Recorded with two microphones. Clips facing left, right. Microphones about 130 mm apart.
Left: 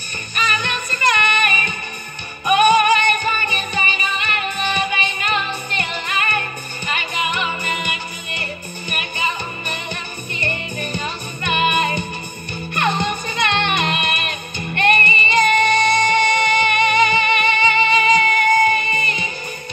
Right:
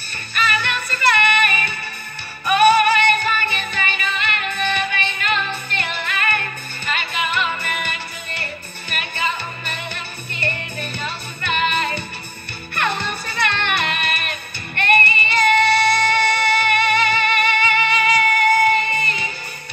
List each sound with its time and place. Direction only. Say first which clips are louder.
0.4 s music: right 1 dB; 15° left (ahead or behind)